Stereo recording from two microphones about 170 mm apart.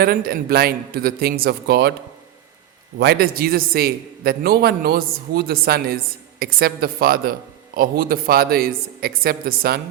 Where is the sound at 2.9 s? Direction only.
75° right (ahead or behind).